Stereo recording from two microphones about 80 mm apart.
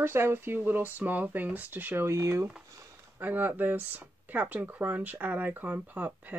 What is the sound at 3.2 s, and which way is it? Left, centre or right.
Speech, right.